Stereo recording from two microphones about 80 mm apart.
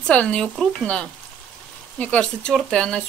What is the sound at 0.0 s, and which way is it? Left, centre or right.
Speech, centre.